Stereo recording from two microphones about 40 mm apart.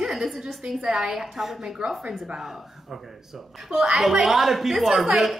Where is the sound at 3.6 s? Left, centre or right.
Centre.